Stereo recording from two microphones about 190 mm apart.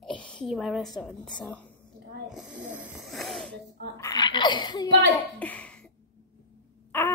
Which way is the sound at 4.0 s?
20° left (ahead or behind).